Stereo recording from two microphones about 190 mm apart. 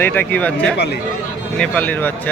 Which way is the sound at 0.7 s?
60° left (ahead or behind).